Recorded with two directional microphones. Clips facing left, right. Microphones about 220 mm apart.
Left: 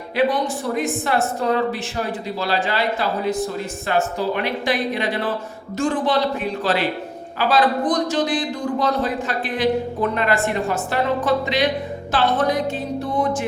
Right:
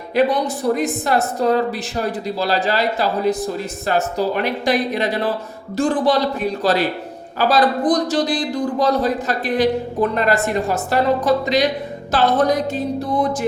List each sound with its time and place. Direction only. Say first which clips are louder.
0.2 s speech: right 3 dB; 40° right (ahead or behind)